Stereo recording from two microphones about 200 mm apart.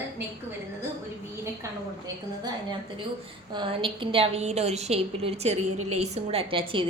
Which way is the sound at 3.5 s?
25° right (ahead or behind).